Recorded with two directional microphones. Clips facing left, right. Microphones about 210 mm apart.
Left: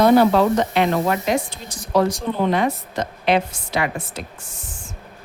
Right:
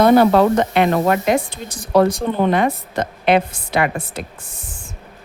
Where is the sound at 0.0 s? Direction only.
55° right (ahead or behind).